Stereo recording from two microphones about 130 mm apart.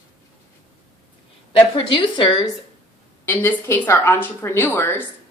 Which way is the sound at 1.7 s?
40° left (ahead or behind).